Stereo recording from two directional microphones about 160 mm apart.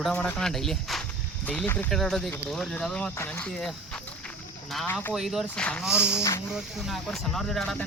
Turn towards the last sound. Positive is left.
turn(degrees=5)  # may be behind; listen again after turning